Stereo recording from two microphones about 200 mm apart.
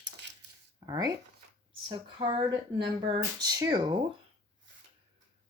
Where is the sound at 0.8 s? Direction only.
20° right (ahead or behind).